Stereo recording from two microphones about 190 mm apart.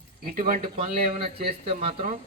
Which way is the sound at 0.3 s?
45° right (ahead or behind).